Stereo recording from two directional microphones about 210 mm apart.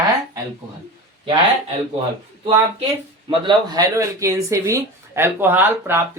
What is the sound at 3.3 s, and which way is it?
Speech, 20° right (ahead or behind).